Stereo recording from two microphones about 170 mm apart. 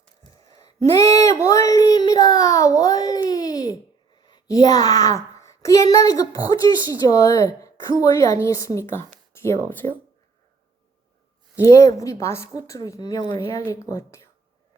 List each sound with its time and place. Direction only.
1.1 s a sound: 15° left (ahead or behind)
4.3 s a child's voice: 25° left (ahead or behind)
11.6 s a woman's voice: 20° left (ahead or behind)